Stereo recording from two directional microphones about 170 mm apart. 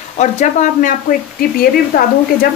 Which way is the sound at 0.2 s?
45° left (ahead or behind).